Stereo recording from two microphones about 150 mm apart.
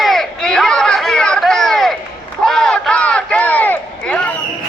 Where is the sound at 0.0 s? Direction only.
Centre (ahead or behind).